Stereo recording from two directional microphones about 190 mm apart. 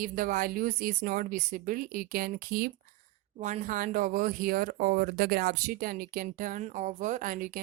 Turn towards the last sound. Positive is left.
turn(degrees=-45)  # may be behind; listen again after turning